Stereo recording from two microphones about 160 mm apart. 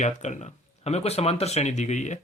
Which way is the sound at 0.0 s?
45° left (ahead or behind).